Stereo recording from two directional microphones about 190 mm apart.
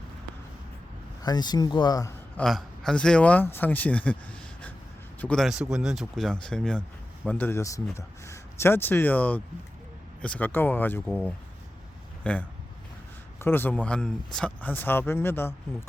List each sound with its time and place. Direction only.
1.2 s speech: 20° left (ahead or behind)
2.4 s speech: centre (ahead or behind)
5.2 s speech: 5° left (ahead or behind)
12.2 s speech: 5° left (ahead or behind)